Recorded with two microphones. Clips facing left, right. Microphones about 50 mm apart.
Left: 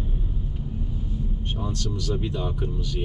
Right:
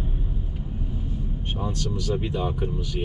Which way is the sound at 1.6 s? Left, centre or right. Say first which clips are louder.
Right 2 dB; centre.